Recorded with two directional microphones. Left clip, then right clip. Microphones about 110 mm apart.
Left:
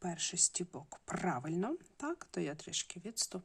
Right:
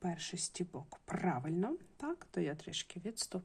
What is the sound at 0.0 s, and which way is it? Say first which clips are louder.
Speech: left 5 dB; 25° left (ahead or behind).